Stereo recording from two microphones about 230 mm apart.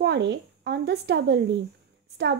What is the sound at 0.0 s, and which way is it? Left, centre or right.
Speech, right.